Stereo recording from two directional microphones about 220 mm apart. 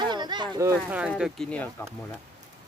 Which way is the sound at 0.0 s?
20° right (ahead or behind).